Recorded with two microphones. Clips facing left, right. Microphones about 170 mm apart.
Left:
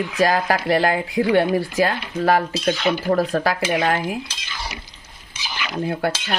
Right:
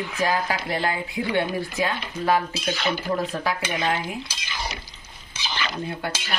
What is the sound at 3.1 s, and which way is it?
Speech, 70° left (ahead or behind).